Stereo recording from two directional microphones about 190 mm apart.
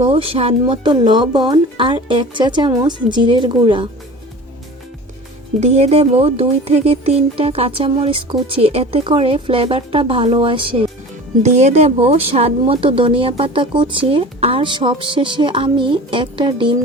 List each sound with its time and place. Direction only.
0.0 s speech: 30° right (ahead or behind)
5.5 s speech: 35° right (ahead or behind)